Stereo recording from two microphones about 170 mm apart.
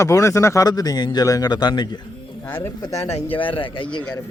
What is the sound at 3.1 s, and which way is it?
Speech, 35° left (ahead or behind).